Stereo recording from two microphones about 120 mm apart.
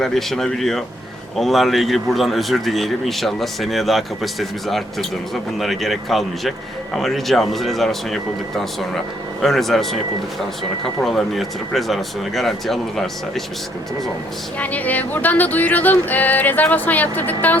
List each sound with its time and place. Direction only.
0.0 s a man's voice: centre (ahead or behind)
14.6 s music: 15° left (ahead or behind)